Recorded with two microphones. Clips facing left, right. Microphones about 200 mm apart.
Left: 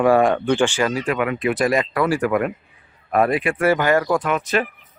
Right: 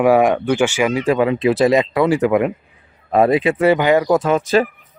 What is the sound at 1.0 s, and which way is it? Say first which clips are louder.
Speech: right 6 dB; 25° right (ahead or behind).